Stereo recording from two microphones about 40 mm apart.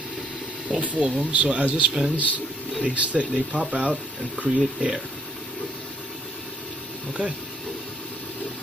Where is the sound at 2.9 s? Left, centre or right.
Right.